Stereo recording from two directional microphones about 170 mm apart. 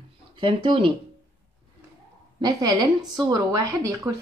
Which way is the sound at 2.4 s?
25° right (ahead or behind).